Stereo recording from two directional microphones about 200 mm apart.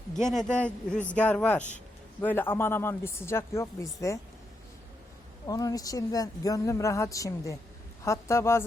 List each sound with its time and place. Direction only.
0.3 s a woman's voice: centre (ahead or behind)
5.5 s a woman's voice: 15° left (ahead or behind)